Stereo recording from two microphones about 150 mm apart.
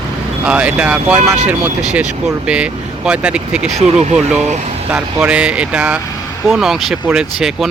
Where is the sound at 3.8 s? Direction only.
45° right (ahead or behind).